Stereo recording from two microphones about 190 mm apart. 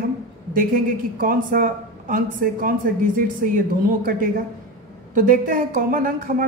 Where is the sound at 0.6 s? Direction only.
45° right (ahead or behind).